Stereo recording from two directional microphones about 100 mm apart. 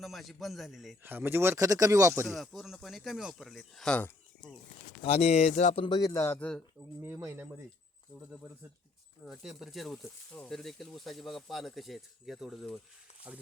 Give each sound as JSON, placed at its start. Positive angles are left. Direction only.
{"t": 0.0, "sound": "speech", "side_deg": 0}
{"t": 1.0, "sound": "speech", "side_deg": -20}
{"t": 2.2, "sound": "speech", "side_deg": 0}
{"t": 3.8, "sound": "speech", "side_deg": 15}
{"t": 5.0, "sound": "speech", "side_deg": 90}
{"t": 5.8, "sound": "speech", "side_deg": 45}
{"t": 6.1, "sound": "speech", "side_deg": 20}
{"t": 7.2, "sound": "speech", "side_deg": -25}
{"t": 9.2, "sound": "speech", "side_deg": -5}
{"t": 13.3, "sound": "speech", "side_deg": -10}